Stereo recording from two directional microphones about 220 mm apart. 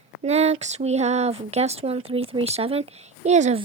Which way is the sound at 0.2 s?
30° right (ahead or behind).